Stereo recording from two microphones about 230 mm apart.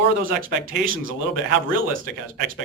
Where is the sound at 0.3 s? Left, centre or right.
Right.